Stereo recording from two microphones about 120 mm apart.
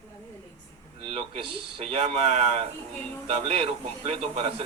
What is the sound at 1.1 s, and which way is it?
Speech, 60° right (ahead or behind).